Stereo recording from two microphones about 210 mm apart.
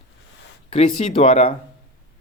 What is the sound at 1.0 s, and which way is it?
Speech, 25° left (ahead or behind).